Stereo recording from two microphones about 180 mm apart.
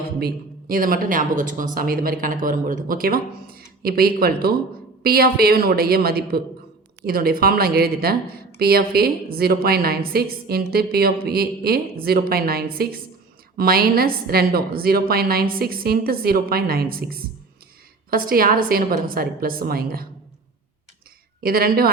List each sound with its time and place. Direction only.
0.2 s a woman's voice: 55° right (ahead or behind)
21.4 s a woman's voice: 55° right (ahead or behind)